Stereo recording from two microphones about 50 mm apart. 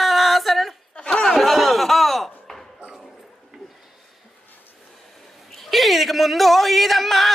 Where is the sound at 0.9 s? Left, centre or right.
Left.